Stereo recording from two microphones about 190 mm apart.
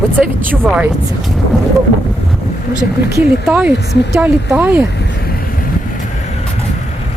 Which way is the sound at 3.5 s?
5° right (ahead or behind).